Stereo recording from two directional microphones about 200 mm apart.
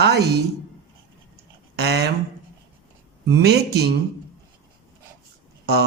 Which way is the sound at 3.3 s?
55° right (ahead or behind).